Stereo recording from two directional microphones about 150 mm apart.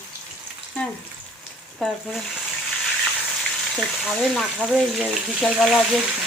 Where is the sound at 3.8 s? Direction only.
Centre (ahead or behind).